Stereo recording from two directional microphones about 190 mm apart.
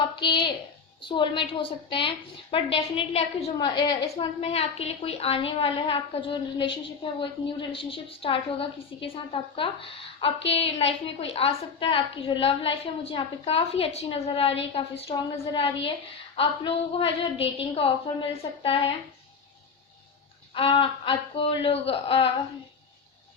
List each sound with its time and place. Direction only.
0.2 s a woman's voice: 25° left (ahead or behind)
3.8 s a woman's voice: 20° left (ahead or behind)
4.4 s a woman's voice: 30° left (ahead or behind)
20.5 s a woman's voice: 30° left (ahead or behind)